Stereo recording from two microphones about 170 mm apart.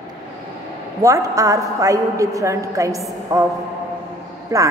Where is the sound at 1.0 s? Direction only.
20° right (ahead or behind).